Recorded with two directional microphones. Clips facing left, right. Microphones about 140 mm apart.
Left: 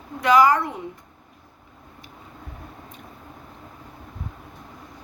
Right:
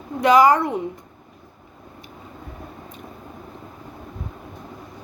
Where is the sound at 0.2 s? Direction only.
20° right (ahead or behind).